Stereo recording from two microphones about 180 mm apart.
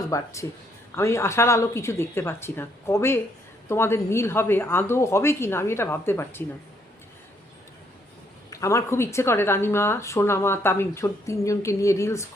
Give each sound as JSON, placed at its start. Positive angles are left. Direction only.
{"t": 0.1, "sound": "a woman's voice", "side_deg": 15}
{"t": 8.4, "sound": "a woman's voice", "side_deg": 15}